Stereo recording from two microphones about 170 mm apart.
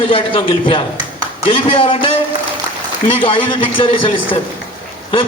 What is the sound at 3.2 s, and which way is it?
A man's voice, 30° left (ahead or behind).